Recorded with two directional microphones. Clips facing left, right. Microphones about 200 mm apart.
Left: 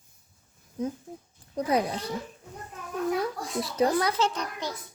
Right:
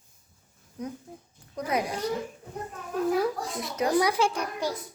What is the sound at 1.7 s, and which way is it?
Speech, 30° left (ahead or behind).